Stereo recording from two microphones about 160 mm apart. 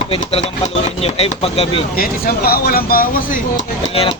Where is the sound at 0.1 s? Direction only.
40° left (ahead or behind).